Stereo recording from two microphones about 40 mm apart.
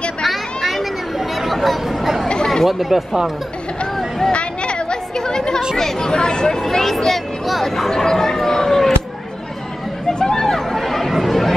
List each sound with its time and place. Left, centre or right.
0.2 s a sound: centre
1.4 s chatter: centre
2.6 s speech: centre
4.3 s chatter: left
5.8 s a sound: centre
10.1 s chatter: centre